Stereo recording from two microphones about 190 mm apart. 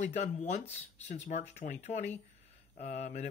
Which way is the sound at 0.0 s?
40° left (ahead or behind).